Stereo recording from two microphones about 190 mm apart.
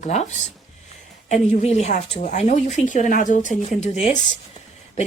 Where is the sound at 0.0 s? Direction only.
35° left (ahead or behind).